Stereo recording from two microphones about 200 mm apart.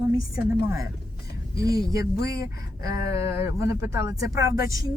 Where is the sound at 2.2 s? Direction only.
50° left (ahead or behind).